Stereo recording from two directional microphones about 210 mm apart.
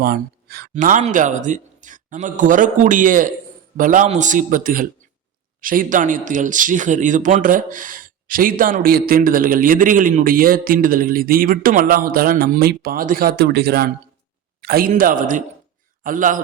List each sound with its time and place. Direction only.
0.0 s a man's voice: 45° right (ahead or behind)